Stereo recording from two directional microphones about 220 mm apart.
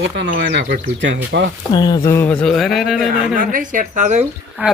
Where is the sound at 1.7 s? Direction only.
20° left (ahead or behind); by 3.4 s centre (ahead or behind).